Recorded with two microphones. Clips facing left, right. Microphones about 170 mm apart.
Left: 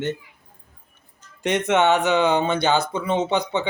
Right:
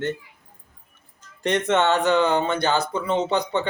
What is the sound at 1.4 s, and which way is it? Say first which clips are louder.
Speech: left 1 dB; 15° left (ahead or behind).